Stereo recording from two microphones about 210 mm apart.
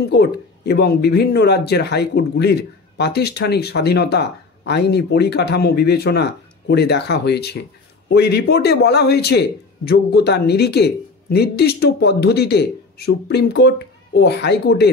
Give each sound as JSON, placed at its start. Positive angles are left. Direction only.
{"t": 0.0, "sound": "speech", "side_deg": 50}